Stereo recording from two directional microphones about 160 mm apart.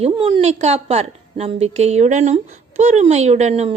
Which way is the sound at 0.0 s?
35° right (ahead or behind).